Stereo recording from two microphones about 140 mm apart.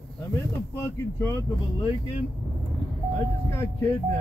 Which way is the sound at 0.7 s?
15° left (ahead or behind).